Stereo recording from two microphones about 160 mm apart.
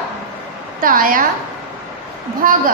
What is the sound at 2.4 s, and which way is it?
Speech, 60° right (ahead or behind).